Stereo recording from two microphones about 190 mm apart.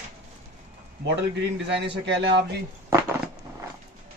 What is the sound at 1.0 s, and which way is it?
A man's voice, 65° right (ahead or behind).